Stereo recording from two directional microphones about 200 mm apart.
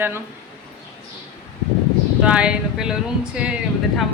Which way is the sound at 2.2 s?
5° right (ahead or behind).